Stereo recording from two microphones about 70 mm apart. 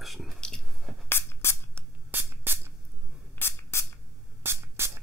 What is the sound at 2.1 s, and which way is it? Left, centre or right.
Spray, right.